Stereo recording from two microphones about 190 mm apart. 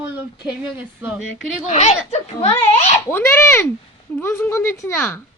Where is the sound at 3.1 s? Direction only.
10° left (ahead or behind).